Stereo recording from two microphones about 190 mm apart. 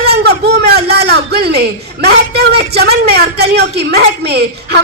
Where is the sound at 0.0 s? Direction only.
55° right (ahead or behind).